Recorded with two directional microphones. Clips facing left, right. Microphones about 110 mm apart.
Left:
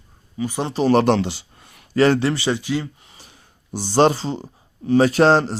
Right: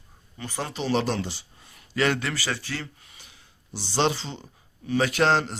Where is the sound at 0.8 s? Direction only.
60° left (ahead or behind); by 1.7 s 80° left.